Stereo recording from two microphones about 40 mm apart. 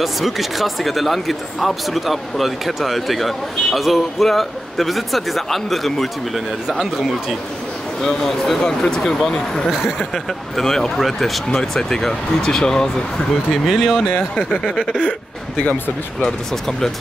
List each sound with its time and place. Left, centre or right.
0.0 s speech: centre
8.0 s speech: centre
9.7 s speech: centre
10.1 s speech: centre
11.5 s speech: centre
13.5 s speech: centre
14.3 s speech: centre
16.2 s speech: centre